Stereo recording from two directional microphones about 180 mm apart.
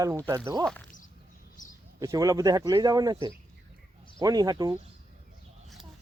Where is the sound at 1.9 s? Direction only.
20° right (ahead or behind).